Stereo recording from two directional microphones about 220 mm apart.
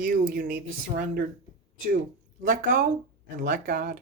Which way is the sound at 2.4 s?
40° right (ahead or behind).